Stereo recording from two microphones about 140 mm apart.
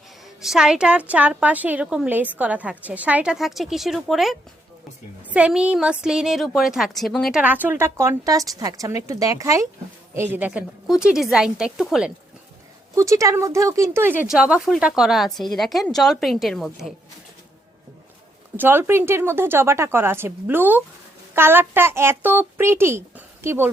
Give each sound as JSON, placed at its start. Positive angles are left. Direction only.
{"t": 0.4, "sound": "a woman's voice", "side_deg": -5}
{"t": 13.0, "sound": "speech", "side_deg": -20}
{"t": 14.3, "sound": "a woman's voice", "side_deg": -5}
{"t": 18.5, "sound": "a woman's voice", "side_deg": -15}